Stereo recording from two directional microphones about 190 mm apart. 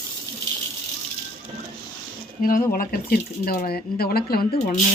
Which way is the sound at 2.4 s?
50° left (ahead or behind).